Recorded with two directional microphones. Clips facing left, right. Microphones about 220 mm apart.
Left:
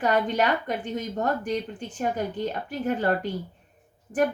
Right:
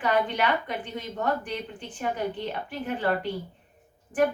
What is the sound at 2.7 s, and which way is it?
Speech, 45° left (ahead or behind).